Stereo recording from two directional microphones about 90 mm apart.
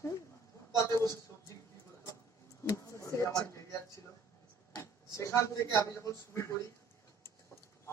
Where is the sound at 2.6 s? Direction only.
35° left (ahead or behind).